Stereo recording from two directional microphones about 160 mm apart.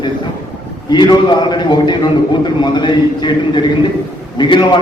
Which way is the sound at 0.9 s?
25° left (ahead or behind).